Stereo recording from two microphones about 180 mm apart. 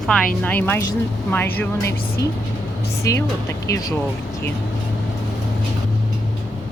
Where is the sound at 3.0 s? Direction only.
15° left (ahead or behind).